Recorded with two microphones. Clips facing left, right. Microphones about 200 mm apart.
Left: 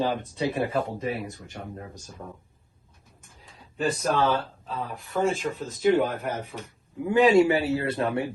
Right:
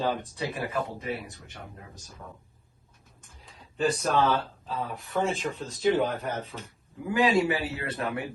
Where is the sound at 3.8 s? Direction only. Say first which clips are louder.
Even; centre (ahead or behind).